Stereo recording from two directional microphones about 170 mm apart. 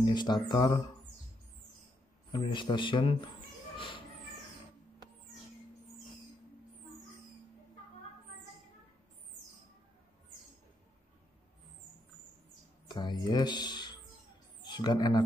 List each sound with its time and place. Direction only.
0.0 s speech: 25° left (ahead or behind)
2.3 s speech: 30° left (ahead or behind)
3.7 s a sound: 30° left (ahead or behind)
12.8 s speech: 25° left (ahead or behind)